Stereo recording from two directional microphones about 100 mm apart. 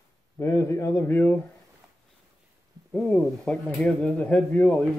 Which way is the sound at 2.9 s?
10° left (ahead or behind).